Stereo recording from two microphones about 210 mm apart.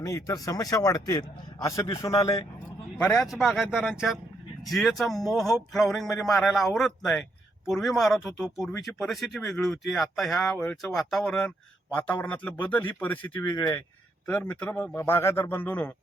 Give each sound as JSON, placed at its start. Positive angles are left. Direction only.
{"t": 0.0, "sound": "a man's voice", "side_deg": 15}
{"t": 3.0, "sound": "a man's voice", "side_deg": 5}